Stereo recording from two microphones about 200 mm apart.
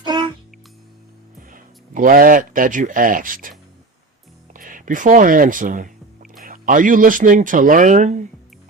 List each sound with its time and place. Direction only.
0.0 s music: 20° right (ahead or behind)
1.5 s speech: 40° right (ahead or behind)
4.5 s speech: 40° right (ahead or behind)